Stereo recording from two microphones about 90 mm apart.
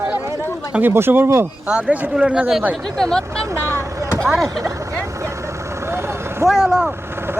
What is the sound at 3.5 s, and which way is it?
Speech, 30° right (ahead or behind).